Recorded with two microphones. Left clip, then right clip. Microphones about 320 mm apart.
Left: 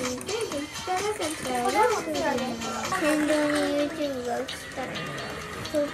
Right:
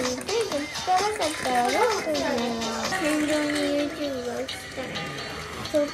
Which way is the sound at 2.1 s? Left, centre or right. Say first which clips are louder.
Right 2 dB; right.